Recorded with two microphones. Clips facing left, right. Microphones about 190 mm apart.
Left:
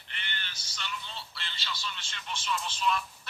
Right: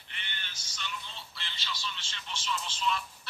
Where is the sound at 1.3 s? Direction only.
55° left (ahead or behind).